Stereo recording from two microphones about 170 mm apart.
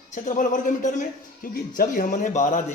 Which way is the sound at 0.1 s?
50° left (ahead or behind).